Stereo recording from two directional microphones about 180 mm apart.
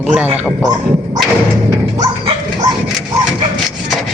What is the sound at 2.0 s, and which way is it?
Dog, 20° right (ahead or behind).